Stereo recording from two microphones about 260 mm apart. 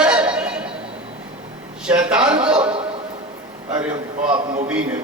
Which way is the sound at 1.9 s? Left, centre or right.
Centre.